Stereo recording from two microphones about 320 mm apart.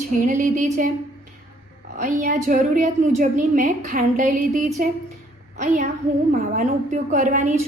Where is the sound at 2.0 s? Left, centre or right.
Right.